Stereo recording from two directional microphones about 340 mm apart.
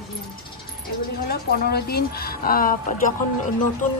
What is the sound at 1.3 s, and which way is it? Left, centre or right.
Speech, left.